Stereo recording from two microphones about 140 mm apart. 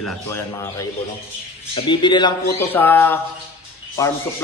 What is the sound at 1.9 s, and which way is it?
Speech, 35° left (ahead or behind).